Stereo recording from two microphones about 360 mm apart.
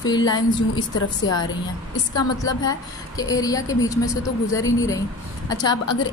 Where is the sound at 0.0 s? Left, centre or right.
Centre.